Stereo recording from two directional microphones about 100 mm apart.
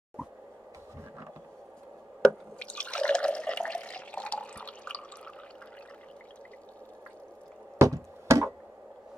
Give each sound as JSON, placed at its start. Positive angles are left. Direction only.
{"t": 2.6, "sound": "water", "side_deg": 10}
{"t": 7.8, "sound": "music", "side_deg": -30}